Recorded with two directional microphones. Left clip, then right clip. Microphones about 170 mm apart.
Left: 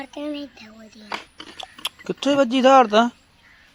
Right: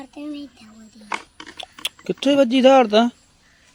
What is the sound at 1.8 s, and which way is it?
Speech, 35° right (ahead or behind).